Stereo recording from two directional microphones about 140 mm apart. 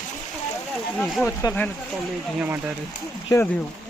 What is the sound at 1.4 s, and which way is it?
Speech, 30° left (ahead or behind).